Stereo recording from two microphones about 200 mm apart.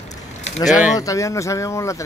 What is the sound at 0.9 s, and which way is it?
Speech, 15° left (ahead or behind).